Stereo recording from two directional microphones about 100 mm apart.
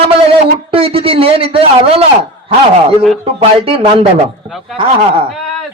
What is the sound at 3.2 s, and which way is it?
Speech, 75° right (ahead or behind).